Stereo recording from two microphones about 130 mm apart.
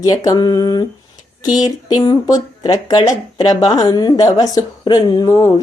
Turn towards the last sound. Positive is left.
turn(degrees=30)  # may be behind; listen again after turning